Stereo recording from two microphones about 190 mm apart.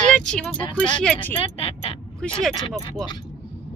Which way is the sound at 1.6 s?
30° left (ahead or behind).